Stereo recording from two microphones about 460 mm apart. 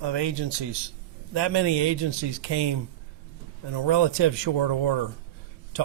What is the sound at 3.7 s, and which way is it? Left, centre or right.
Speech, right.